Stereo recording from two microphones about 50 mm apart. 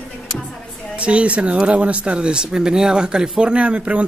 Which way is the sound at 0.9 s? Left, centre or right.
Right.